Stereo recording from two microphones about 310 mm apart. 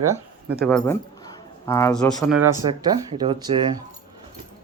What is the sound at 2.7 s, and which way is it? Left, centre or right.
Speech, centre.